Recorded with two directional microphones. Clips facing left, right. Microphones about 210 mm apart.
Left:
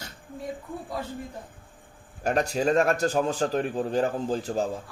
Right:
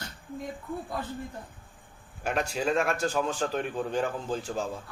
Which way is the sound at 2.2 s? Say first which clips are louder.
Left 4 dB; 40° left (ahead or behind).